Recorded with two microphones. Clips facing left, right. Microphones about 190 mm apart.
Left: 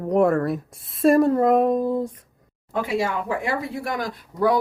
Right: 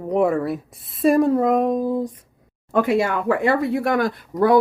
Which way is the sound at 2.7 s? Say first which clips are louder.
Right 5 dB; 55° right (ahead or behind).